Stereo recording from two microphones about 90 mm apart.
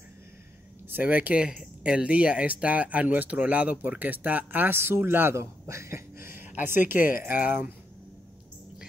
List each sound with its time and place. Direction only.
0.8 s speech: 20° right (ahead or behind)